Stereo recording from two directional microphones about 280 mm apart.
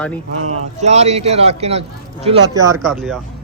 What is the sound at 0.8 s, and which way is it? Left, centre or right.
A man's voice, right.